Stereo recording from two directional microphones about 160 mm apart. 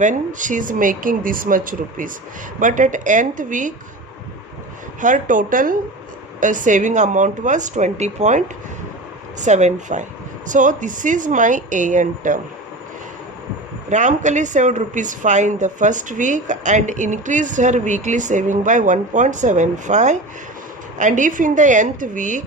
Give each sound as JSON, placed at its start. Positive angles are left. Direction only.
{"t": 0.0, "sound": "a woman's voice", "side_deg": -50}
{"t": 4.9, "sound": "a woman's voice", "side_deg": -55}
{"t": 13.9, "sound": "a woman's voice", "side_deg": -50}